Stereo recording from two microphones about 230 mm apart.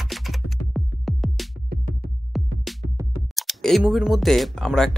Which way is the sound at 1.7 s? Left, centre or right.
Right.